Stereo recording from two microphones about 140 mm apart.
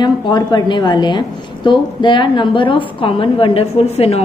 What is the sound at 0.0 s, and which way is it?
A woman's voice, 30° left (ahead or behind).